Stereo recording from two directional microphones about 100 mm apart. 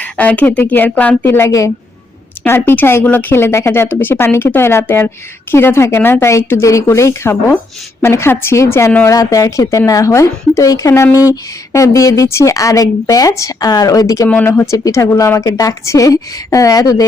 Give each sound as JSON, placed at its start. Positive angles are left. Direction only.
{"t": 0.0, "sound": "a woman's voice", "side_deg": 15}
{"t": 2.5, "sound": "a woman's voice", "side_deg": 20}